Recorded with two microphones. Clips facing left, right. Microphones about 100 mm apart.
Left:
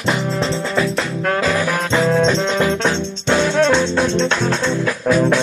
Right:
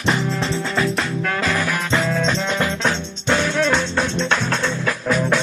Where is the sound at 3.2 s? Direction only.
Centre (ahead or behind).